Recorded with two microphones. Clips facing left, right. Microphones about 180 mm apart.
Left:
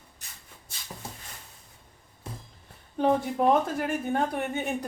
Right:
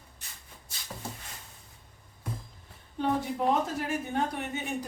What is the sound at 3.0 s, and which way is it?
Speech, 60° left (ahead or behind).